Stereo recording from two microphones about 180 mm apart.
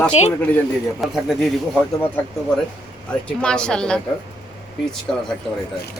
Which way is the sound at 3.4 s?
5° left (ahead or behind).